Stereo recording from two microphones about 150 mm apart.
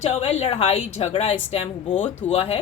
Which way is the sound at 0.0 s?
45° left (ahead or behind).